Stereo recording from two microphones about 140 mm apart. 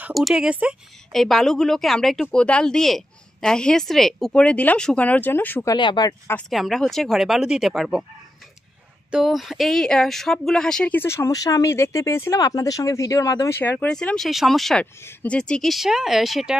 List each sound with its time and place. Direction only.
0.1 s a woman's voice: centre (ahead or behind); by 5.8 s 15° left (ahead or behind)
5.8 s speech: 30° left (ahead or behind)
6.5 s speech: centre (ahead or behind)
9.1 s speech: centre (ahead or behind); by 13.6 s 25° left (ahead or behind)
13.6 s speech: 10° left (ahead or behind)
15.0 s speech: 15° left (ahead or behind)